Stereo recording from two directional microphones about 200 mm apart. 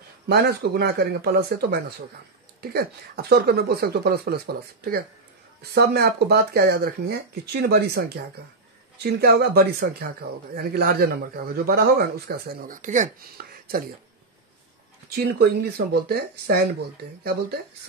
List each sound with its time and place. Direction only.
0.3 s speech: 50° right (ahead or behind)
5.6 s speech: 55° right (ahead or behind)
9.0 s speech: 50° right (ahead or behind)
15.0 s speech: 50° right (ahead or behind)